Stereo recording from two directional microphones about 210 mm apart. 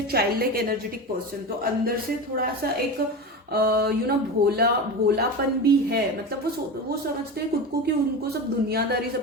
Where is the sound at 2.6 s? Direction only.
45° right (ahead or behind).